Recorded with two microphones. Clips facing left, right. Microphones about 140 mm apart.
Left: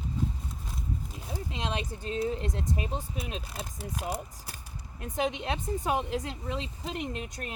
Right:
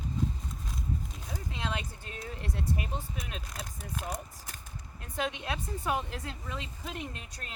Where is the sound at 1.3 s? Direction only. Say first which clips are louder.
Left 3 dB; 25° left (ahead or behind).